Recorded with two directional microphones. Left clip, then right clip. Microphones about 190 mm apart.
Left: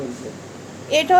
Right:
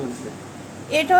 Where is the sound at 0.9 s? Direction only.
10° left (ahead or behind).